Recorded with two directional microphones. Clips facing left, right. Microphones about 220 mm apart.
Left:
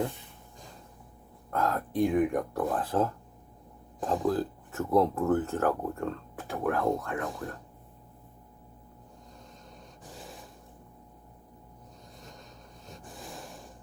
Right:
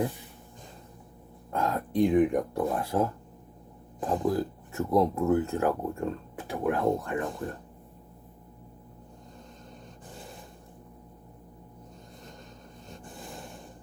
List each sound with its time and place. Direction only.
1.5 s speech: 15° right (ahead or behind)
4.0 s speech: centre (ahead or behind)
4.3 s speech: 10° right (ahead or behind)
7.3 s speech: centre (ahead or behind)
10.1 s a sound: centre (ahead or behind)
12.9 s a sound: centre (ahead or behind)